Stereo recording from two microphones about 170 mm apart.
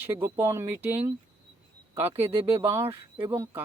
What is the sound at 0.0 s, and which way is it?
Speech, 15° right (ahead or behind).